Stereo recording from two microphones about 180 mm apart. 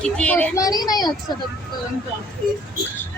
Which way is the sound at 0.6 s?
20° left (ahead or behind).